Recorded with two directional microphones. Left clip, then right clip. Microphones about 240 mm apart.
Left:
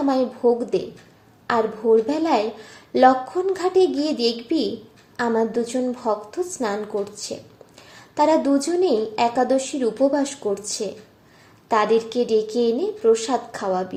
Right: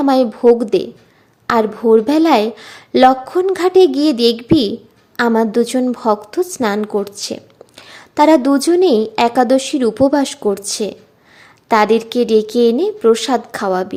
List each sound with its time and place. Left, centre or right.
0.0 s a woman's voice: right